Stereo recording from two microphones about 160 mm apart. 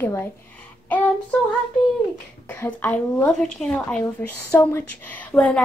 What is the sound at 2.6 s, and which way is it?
A woman's voice, 10° left (ahead or behind).